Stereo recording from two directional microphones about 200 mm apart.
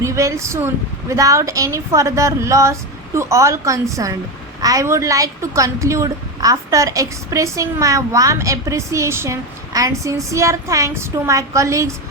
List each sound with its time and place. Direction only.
0.0 s a woman's voice: 15° right (ahead or behind)